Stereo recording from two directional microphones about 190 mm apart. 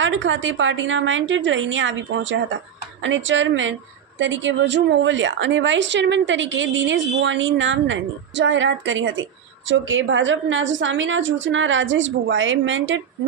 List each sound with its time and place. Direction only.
0.0 s a woman's voice: 85° right